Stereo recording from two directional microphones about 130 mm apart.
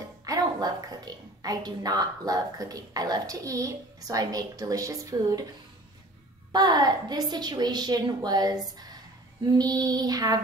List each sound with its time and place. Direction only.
0.2 s a woman's voice: 30° right (ahead or behind)
6.5 s a woman's voice: 30° right (ahead or behind)